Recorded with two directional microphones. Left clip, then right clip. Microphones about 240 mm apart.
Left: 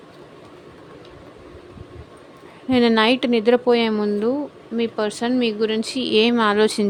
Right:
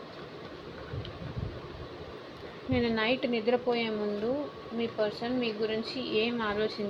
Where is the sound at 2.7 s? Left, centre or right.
Left.